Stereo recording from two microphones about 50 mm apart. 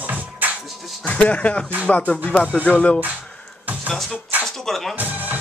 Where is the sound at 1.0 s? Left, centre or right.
Left.